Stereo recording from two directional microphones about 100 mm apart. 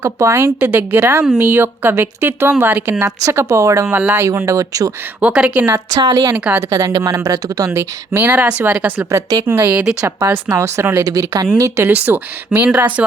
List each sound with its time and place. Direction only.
0.0 s speech: 30° right (ahead or behind)
0.6 s a woman's voice: 20° right (ahead or behind); by 4.9 s 35° right (ahead or behind)
5.2 s speech: 10° right (ahead or behind)
5.9 s speech: 45° right (ahead or behind)
6.3 s speech: 15° right (ahead or behind)
6.6 s a woman's voice: 35° right (ahead or behind)
8.3 s speech: 15° right (ahead or behind)
9.0 s a woman's voice: 30° right (ahead or behind); by 12.9 s 15° right (ahead or behind)